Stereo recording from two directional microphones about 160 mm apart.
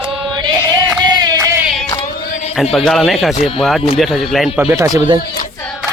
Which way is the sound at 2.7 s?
Centre (ahead or behind).